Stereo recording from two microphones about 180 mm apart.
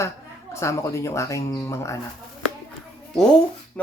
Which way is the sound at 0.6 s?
15° left (ahead or behind).